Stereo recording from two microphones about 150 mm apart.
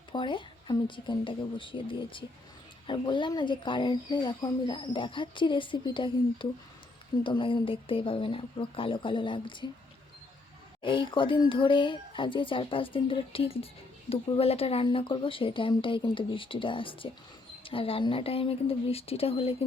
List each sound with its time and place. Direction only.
0.1 s speech: 30° left (ahead or behind)
10.8 s speech: 35° left (ahead or behind)